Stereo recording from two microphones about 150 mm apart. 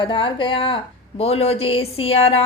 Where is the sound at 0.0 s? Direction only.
35° left (ahead or behind).